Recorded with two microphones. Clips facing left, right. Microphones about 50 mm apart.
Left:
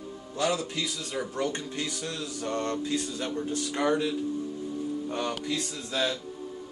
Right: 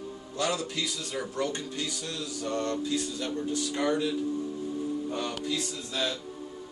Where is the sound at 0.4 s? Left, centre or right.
Centre.